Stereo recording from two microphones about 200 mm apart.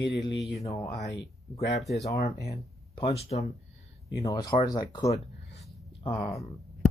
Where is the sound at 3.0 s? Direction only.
30° left (ahead or behind).